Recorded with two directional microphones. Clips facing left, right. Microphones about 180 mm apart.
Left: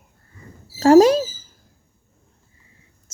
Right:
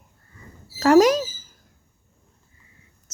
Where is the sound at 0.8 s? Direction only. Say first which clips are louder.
Left 3 dB; 30° left (ahead or behind).